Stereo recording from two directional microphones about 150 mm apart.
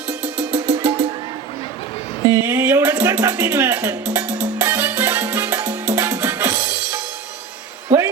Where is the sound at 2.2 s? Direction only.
20° right (ahead or behind).